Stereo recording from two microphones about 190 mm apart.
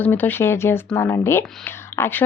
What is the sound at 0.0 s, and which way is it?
Speech, 10° left (ahead or behind).